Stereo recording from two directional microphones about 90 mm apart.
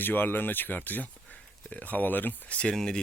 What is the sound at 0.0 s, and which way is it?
Speech, 20° left (ahead or behind).